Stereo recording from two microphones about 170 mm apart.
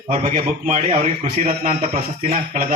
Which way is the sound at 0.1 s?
45° right (ahead or behind).